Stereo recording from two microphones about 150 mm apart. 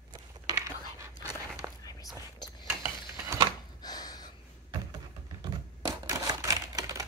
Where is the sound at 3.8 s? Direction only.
25° left (ahead or behind).